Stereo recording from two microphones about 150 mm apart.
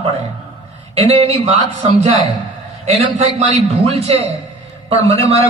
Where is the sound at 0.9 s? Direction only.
45° right (ahead or behind).